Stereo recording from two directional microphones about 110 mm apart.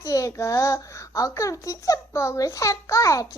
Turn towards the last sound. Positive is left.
turn(degrees=30)  # may be behind; listen again after turning